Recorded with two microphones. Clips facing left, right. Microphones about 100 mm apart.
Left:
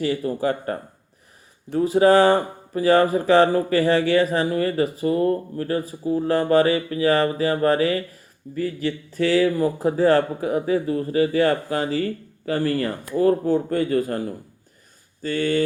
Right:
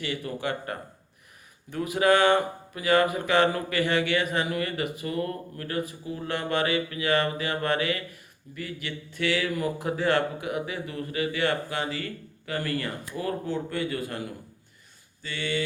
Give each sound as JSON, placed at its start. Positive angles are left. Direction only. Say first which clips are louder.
{"t": 0.0, "sound": "speech", "louder": "left 9 dB", "side_deg": 35}